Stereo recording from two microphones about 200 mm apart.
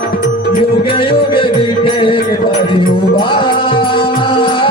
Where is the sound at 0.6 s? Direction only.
25° left (ahead or behind).